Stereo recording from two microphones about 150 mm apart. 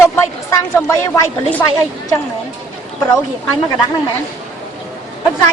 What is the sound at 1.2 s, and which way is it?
Speech, 15° left (ahead or behind).